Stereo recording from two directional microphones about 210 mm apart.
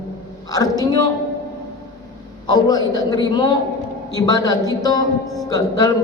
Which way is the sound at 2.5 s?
20° left (ahead or behind).